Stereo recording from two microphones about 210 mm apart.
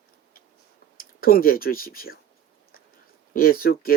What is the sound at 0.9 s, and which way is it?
Speech, 45° left (ahead or behind).